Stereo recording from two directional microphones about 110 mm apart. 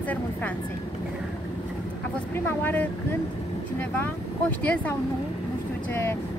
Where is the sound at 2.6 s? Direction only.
15° left (ahead or behind).